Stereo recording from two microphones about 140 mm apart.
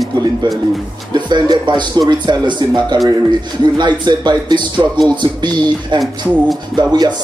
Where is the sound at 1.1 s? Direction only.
30° right (ahead or behind).